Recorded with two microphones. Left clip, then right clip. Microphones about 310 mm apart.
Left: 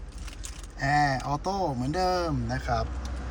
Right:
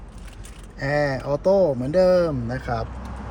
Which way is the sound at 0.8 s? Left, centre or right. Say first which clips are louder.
Right 2 dB; centre.